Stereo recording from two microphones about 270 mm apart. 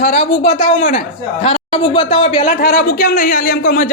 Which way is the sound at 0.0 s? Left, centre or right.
Left.